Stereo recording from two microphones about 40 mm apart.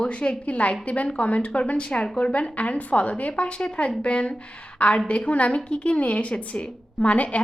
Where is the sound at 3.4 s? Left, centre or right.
Left.